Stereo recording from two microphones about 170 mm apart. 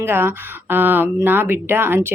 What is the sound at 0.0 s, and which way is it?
Speech, 15° right (ahead or behind).